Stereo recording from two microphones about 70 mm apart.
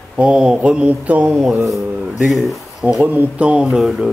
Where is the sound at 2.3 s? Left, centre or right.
Centre.